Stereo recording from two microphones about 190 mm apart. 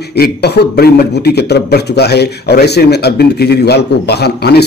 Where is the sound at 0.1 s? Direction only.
60° left (ahead or behind).